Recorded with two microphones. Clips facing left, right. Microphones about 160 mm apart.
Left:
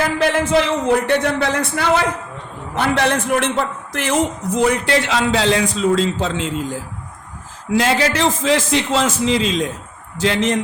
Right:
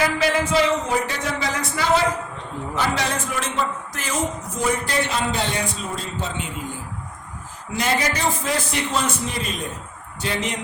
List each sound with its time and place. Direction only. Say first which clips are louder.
0.2 s a man's voice: left 3 dB; 55° left (ahead or behind); by 10.6 s 90° left